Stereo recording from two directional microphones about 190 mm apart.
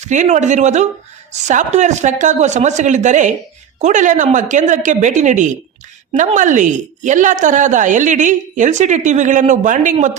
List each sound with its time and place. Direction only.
0.0 s a woman's voice: 40° right (ahead or behind)